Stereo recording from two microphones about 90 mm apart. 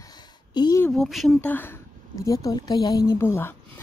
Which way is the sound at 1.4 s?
20° left (ahead or behind).